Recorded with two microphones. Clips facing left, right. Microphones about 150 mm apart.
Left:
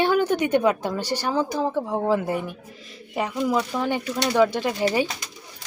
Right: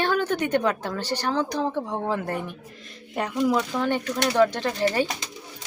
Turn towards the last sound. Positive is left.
turn(degrees=10)  # may be behind; listen again after turning